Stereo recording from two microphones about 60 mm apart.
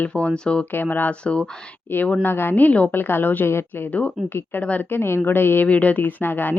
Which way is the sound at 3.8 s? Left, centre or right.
Left.